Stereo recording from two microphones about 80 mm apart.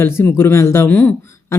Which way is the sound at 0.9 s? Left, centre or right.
Left.